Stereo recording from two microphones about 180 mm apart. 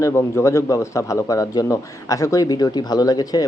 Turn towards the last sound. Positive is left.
turn(degrees=20)  # may be behind; listen again after turning